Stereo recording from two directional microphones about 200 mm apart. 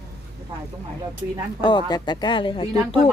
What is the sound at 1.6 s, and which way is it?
Speech, 20° left (ahead or behind).